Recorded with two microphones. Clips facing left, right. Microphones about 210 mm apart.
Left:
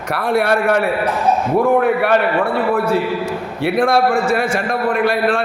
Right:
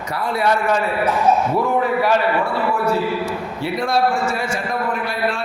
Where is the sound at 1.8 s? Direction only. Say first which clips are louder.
Left 3 dB; 60° left (ahead or behind).